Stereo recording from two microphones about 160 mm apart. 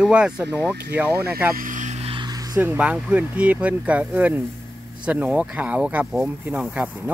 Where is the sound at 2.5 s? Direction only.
10° right (ahead or behind).